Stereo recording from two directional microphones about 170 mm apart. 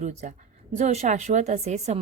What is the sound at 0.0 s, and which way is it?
A woman's voice, 45° right (ahead or behind).